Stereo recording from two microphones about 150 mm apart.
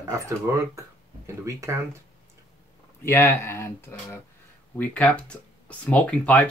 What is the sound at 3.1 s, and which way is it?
Speech, 15° left (ahead or behind).